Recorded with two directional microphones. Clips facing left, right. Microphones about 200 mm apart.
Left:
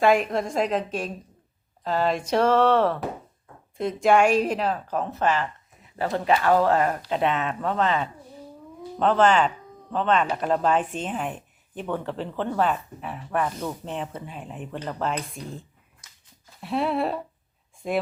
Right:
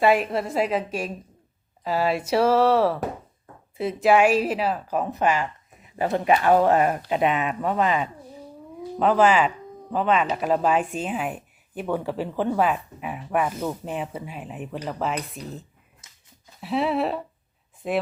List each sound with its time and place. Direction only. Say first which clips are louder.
0.0 s speech: even; 5° right (ahead or behind)